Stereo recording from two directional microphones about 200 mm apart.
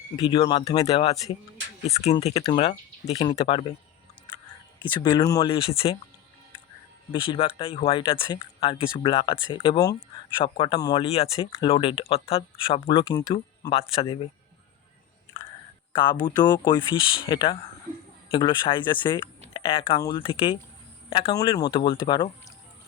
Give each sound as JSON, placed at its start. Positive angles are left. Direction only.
{"t": 0.3, "sound": "speech", "side_deg": 25}
{"t": 4.8, "sound": "speech", "side_deg": 25}
{"t": 7.1, "sound": "speech", "side_deg": 25}
{"t": 15.9, "sound": "speech", "side_deg": 25}